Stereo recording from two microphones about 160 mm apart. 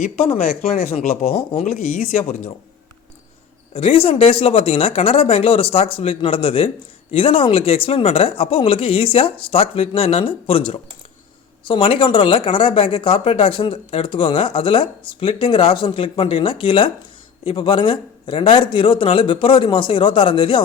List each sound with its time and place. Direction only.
0.0 s speech: 60° left (ahead or behind)
2.2 s speech: 50° left (ahead or behind)
3.8 s speech: 35° left (ahead or behind)